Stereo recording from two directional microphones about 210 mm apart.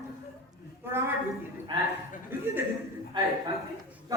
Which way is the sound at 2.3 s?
10° right (ahead or behind).